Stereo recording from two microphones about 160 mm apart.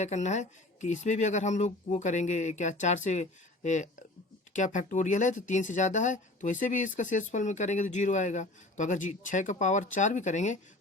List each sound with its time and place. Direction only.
0.0 s speech: 45° left (ahead or behind)